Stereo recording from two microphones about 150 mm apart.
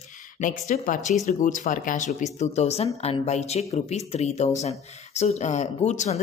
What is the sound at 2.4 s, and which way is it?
Speech, 45° left (ahead or behind).